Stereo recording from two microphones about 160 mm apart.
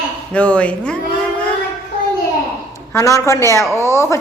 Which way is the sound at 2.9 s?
20° left (ahead or behind).